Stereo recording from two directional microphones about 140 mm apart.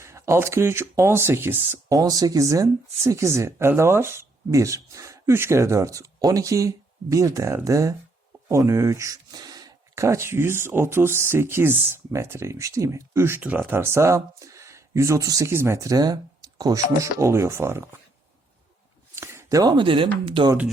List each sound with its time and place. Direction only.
0.0 s speech: 20° right (ahead or behind)
19.1 s a sound: 20° right (ahead or behind)
19.7 s speech: 35° right (ahead or behind)